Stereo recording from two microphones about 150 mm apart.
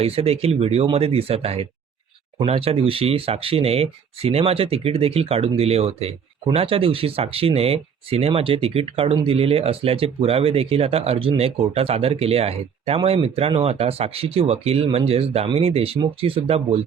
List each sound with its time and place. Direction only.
0.0 s speech: 40° right (ahead or behind)